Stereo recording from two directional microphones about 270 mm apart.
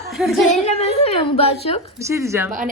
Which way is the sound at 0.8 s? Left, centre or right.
Left.